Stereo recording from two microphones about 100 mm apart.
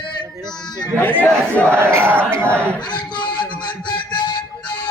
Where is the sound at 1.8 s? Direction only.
25° right (ahead or behind).